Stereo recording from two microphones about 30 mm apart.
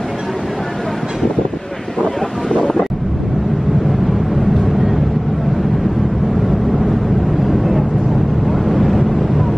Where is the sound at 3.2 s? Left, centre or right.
Centre.